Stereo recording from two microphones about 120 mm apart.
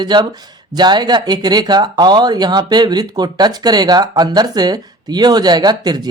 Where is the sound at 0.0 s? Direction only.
35° right (ahead or behind).